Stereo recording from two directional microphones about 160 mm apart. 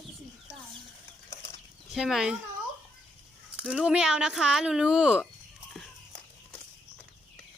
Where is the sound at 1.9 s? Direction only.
Centre (ahead or behind).